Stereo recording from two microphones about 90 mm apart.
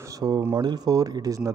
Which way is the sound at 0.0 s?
45° right (ahead or behind).